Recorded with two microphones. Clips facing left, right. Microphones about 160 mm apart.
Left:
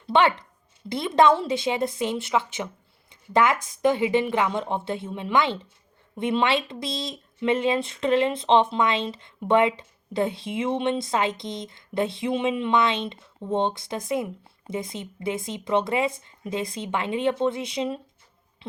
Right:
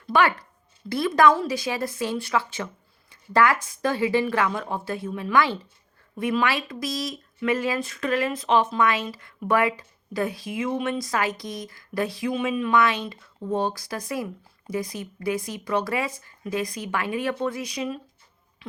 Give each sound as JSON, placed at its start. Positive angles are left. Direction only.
{"t": 0.1, "sound": "speech", "side_deg": 25}